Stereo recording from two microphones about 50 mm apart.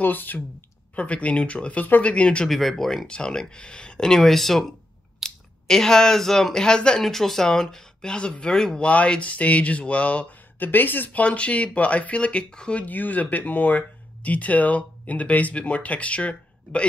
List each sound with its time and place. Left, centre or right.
0.0 s speech: left
0.9 s speech: left
2.4 s speech: centre
3.1 s speech: centre
7.0 s speech: centre
8.7 s speech: left
10.6 s speech: left
11.2 s speech: left
12.8 s speech: left